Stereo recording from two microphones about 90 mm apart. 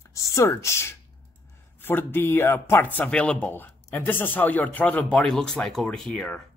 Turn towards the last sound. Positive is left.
turn(degrees=10)  # may be behind; listen again after turning